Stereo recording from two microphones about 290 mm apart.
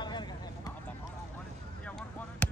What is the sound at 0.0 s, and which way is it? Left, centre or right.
Vehicle, centre.